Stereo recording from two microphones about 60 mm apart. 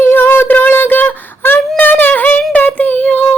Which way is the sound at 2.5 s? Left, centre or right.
Left.